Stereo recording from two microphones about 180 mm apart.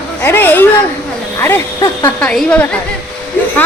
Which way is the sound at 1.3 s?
15° left (ahead or behind).